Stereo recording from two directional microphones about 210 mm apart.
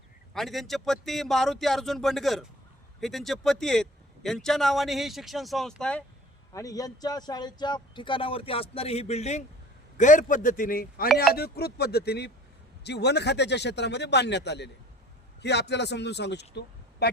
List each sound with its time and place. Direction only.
0.3 s a man's voice: centre (ahead or behind)
6.5 s a man's voice: 15° left (ahead or behind); by 17.1 s 55° left (ahead or behind)